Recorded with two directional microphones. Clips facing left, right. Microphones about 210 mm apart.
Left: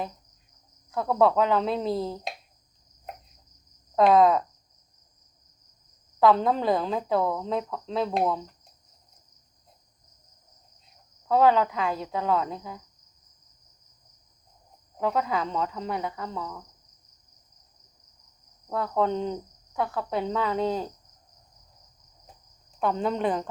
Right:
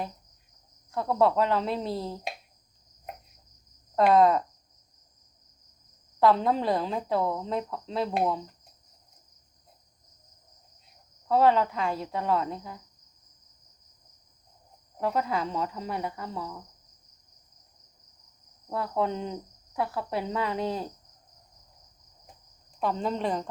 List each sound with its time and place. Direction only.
0.9 s speech: centre (ahead or behind)
3.9 s speech: centre (ahead or behind)
6.1 s speech: centre (ahead or behind)
11.3 s speech: centre (ahead or behind)
14.9 s speech: centre (ahead or behind)
18.7 s speech: 5° right (ahead or behind)
22.8 s speech: centre (ahead or behind)